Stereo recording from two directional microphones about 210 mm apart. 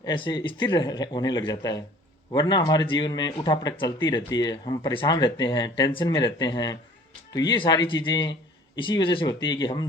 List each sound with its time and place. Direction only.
0.0 s speech: 20° left (ahead or behind)